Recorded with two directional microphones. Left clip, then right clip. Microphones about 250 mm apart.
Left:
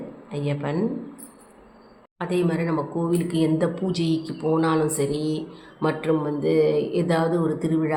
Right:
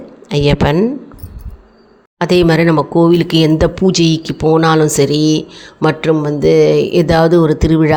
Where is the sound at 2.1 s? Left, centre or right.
Right.